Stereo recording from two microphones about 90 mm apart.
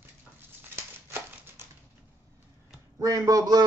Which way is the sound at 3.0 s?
40° right (ahead or behind).